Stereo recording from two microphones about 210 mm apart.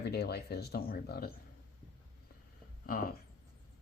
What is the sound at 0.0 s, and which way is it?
Speech, 50° left (ahead or behind).